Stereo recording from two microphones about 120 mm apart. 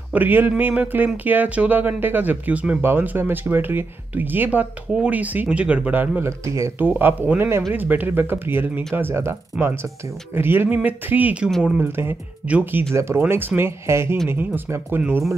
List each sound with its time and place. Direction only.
0.1 s speech: 15° right (ahead or behind)